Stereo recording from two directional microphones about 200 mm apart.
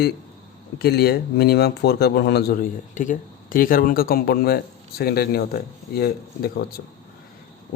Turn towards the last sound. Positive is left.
turn(degrees=50)  # may be behind; listen again after turning